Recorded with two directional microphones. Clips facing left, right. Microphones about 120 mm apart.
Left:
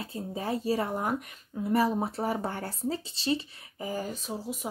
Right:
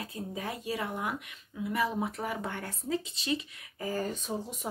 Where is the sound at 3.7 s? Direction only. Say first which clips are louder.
Even; 15° left (ahead or behind).